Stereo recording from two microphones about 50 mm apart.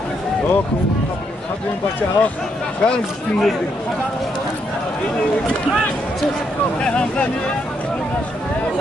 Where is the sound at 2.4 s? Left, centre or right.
Centre.